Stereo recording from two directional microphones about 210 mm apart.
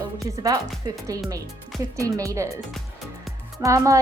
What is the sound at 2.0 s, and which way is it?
Speech, 15° right (ahead or behind).